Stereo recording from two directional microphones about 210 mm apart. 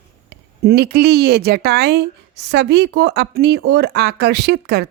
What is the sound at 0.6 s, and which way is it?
A woman's voice, 50° right (ahead or behind).